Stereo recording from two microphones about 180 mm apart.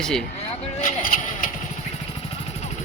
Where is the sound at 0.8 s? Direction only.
50° left (ahead or behind).